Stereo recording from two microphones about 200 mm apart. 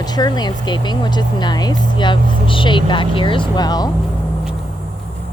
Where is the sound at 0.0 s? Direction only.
20° left (ahead or behind).